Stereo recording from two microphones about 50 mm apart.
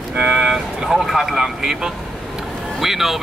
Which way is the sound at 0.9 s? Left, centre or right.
Centre.